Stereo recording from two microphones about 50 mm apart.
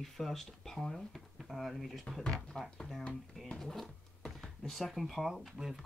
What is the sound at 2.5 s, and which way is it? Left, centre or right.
Speech, centre.